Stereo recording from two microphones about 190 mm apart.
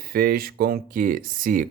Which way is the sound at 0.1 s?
50° right (ahead or behind).